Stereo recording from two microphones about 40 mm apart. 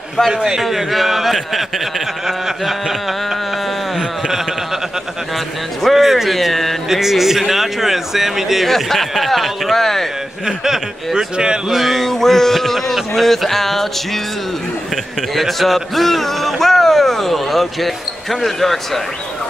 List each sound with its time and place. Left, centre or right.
0.3 s speech: centre
0.6 s speech: centre
5.8 s speech: centre
6.3 s speech: centre
6.9 s speech: centre
8.6 s speech: centre
10.4 s speech: centre
11.7 s a sound: centre
12.9 s speech: centre
15.3 s speech: centre